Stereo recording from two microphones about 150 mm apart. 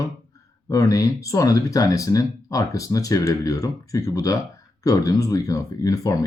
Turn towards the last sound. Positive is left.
turn(degrees=25)  # may be behind; listen again after turning